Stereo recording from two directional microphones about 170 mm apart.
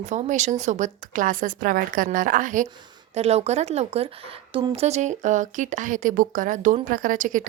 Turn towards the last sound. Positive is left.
turn(degrees=-50)  # may be behind; listen again after turning